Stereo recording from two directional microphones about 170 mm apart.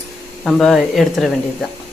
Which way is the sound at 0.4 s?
Centre (ahead or behind).